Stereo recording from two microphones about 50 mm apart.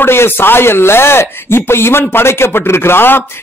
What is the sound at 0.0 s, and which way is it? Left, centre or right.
Speech, left.